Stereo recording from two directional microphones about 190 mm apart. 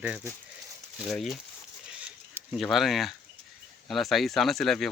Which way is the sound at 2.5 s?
Centre (ahead or behind).